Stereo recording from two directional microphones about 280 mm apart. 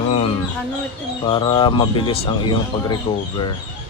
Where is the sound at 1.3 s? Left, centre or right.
Centre.